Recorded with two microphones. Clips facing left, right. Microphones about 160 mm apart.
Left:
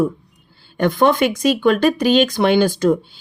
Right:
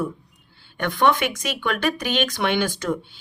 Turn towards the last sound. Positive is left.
turn(degrees=35)  # may be behind; listen again after turning